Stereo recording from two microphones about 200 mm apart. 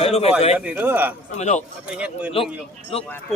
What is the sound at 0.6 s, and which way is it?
Speech, 10° right (ahead or behind).